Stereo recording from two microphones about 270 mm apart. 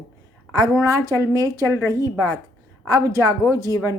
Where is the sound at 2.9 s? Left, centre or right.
Centre.